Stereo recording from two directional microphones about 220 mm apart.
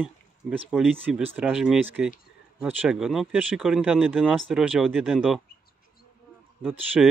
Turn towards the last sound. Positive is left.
turn(degrees=-10)  # may be behind; listen again after turning